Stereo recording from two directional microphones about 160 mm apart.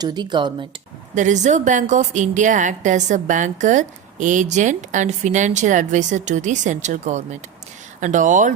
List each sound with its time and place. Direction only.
0.0 s speech: 25° right (ahead or behind)
1.1 s a woman's voice: 50° right (ahead or behind)